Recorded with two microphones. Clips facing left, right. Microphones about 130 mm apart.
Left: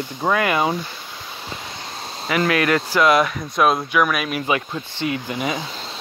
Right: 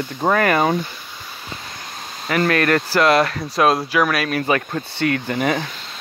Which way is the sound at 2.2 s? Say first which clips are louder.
Right 1 dB; 45° right (ahead or behind).